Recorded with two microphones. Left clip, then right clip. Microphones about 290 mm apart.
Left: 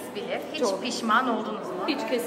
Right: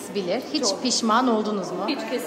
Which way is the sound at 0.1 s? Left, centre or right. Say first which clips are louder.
Right 7 dB; right.